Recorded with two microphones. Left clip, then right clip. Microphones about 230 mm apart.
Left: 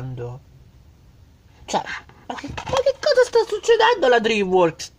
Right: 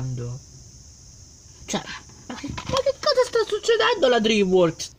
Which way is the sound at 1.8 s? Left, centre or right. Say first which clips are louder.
Left 7 dB; centre.